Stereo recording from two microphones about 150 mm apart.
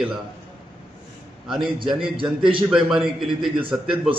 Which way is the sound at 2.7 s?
5° right (ahead or behind).